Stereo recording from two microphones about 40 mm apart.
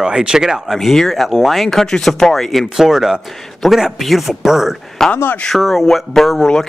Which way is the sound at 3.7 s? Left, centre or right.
Centre.